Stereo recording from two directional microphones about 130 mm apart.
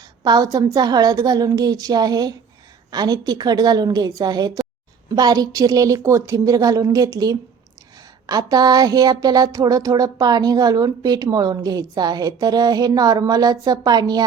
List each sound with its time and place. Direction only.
0.3 s a woman's voice: 30° right (ahead or behind)